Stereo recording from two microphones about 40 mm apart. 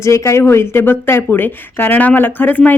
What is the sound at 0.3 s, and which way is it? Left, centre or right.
Speech, left.